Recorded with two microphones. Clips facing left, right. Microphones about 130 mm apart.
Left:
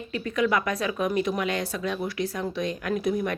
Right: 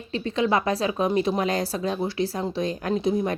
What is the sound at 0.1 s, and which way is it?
A woman's voice, 30° right (ahead or behind).